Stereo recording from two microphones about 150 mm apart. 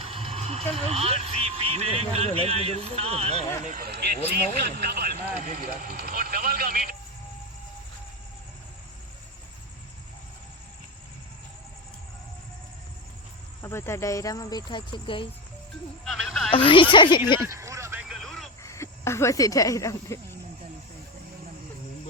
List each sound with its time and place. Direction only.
0.0 s speech: 35° right (ahead or behind)
3.6 s a man's voice: 65° right (ahead or behind); by 5.5 s 90° right
5.8 s speech: 70° right (ahead or behind)
13.6 s speech: 15° left (ahead or behind); by 15.3 s 35° left (ahead or behind)
16.0 s speech: centre (ahead or behind)
16.5 s speech: 35° left (ahead or behind)
17.5 s a sound: 20° right (ahead or behind)
18.1 s radio: centre (ahead or behind)
18.6 s speech: 20° left (ahead or behind)